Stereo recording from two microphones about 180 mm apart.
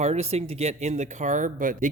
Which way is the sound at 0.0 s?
35° right (ahead or behind).